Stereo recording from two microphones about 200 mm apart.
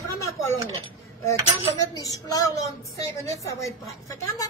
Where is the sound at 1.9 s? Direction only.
15° left (ahead or behind).